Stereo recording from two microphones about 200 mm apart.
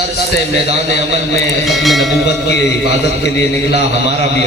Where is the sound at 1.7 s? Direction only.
Centre (ahead or behind).